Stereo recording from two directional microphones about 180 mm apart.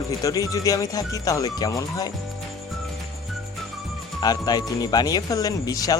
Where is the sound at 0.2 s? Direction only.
20° left (ahead or behind).